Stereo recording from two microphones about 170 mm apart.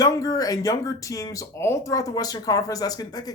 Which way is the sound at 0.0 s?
20° left (ahead or behind).